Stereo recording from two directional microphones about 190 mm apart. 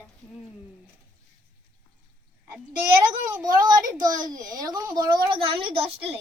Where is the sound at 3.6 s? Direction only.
20° right (ahead or behind).